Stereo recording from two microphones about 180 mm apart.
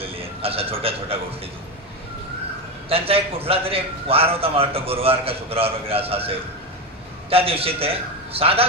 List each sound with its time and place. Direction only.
0.0 s a man's voice: 30° right (ahead or behind)
2.9 s a man's voice: 30° right (ahead or behind)